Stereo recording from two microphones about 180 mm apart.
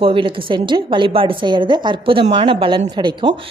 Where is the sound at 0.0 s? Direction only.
30° right (ahead or behind).